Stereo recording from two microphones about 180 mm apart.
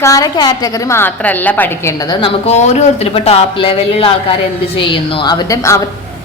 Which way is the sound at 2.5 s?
35° left (ahead or behind).